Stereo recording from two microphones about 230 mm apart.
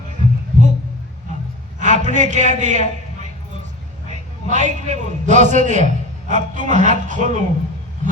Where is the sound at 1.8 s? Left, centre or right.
Right.